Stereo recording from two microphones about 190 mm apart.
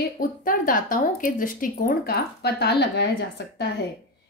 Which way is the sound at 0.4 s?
45° left (ahead or behind).